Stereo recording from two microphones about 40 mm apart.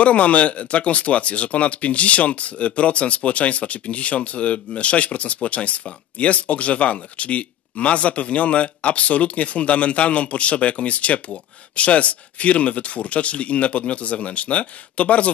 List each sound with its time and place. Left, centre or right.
0.0 s speech: left